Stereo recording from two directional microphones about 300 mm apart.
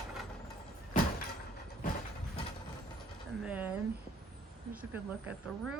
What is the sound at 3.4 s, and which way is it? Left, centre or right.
Speech, centre.